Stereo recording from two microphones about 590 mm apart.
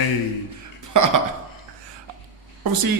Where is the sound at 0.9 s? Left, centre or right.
Right.